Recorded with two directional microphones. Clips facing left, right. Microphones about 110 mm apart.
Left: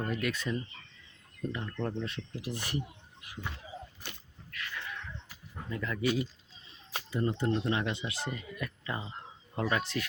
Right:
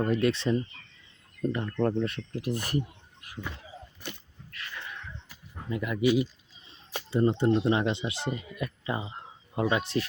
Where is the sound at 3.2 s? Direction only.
45° right (ahead or behind).